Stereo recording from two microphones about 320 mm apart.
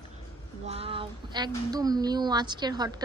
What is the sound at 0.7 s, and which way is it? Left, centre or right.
A woman's voice, centre.